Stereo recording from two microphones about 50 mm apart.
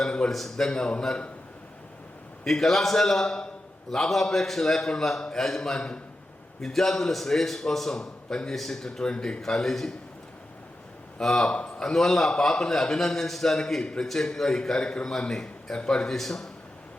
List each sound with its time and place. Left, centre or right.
0.0 s a sound: centre
0.3 s a man's voice: centre
2.5 s a man's voice: centre
11.2 s a man's voice: centre
11.8 s a man's voice: centre
13.8 s a man's voice: centre
14.1 s a man's voice: centre